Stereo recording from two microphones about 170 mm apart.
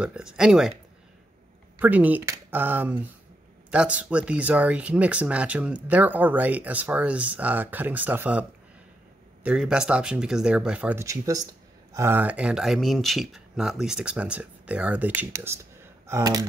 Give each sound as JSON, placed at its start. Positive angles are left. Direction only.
{"t": 0.0, "sound": "speech", "side_deg": -5}
{"t": 1.8, "sound": "speech", "side_deg": -10}